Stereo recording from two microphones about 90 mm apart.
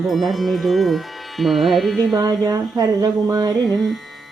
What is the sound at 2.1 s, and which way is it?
Speech, 40° right (ahead or behind).